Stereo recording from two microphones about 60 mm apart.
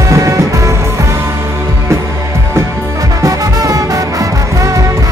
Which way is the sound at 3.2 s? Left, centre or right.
Right.